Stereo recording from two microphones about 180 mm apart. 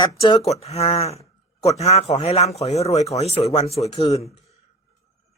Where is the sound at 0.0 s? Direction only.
25° left (ahead or behind).